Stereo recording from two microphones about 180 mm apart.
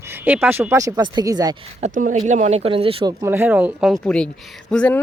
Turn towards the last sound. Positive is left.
turn(degrees=5)  # may be behind; listen again after turning